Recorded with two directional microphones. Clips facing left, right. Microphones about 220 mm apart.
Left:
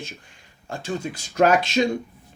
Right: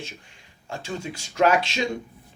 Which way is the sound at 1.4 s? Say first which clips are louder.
Left 3 dB; 45° left (ahead or behind).